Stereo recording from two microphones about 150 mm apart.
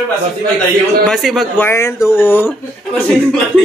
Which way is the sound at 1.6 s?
15° left (ahead or behind).